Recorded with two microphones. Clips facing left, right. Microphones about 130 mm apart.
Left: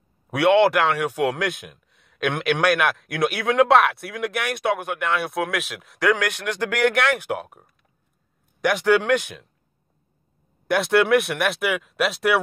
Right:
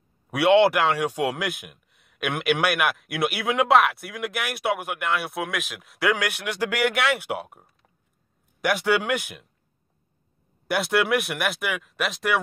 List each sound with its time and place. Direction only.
0.5 s speech: 15° right (ahead or behind)
1.4 s a man's voice: 5° right (ahead or behind)
6.0 s speech: 15° right (ahead or behind)
10.7 s a man's voice: 5° right (ahead or behind)